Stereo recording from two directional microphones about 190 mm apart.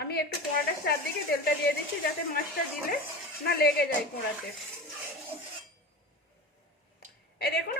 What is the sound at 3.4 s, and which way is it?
Speech, 55° left (ahead or behind).